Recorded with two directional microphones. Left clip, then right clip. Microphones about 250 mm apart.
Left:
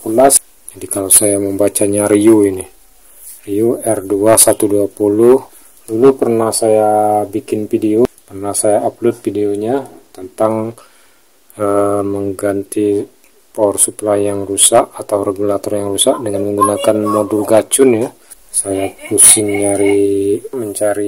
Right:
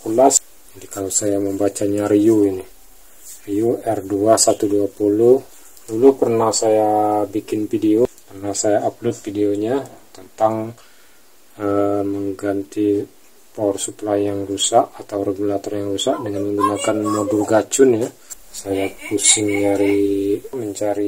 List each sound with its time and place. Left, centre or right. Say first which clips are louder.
0.7 s speech: left 7 dB; left
18.5 s speech: left 4 dB; left